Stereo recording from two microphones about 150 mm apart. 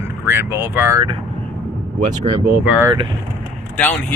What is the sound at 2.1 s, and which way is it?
Speech, 35° right (ahead or behind).